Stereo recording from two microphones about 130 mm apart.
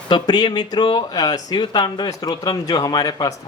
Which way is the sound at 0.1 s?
35° left (ahead or behind).